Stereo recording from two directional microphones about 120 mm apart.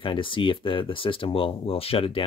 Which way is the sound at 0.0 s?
45° left (ahead or behind).